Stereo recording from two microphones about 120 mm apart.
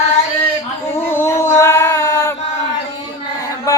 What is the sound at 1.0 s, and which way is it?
Female singing, 20° left (ahead or behind).